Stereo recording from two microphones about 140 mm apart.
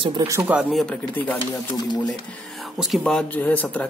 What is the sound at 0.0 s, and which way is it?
Speech, 35° right (ahead or behind).